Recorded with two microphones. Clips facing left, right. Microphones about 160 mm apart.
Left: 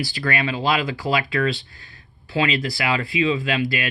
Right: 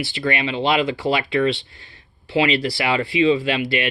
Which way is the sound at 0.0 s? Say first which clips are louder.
Right 1 dB; 25° right (ahead or behind).